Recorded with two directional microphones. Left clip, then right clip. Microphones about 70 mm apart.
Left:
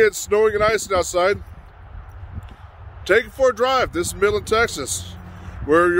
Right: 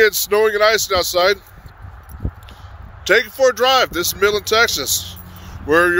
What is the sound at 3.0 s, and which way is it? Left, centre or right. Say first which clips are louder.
Speech: right 3 dB; left.